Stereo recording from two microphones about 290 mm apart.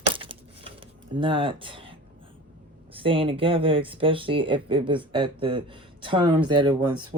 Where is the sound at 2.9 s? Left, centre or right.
Centre.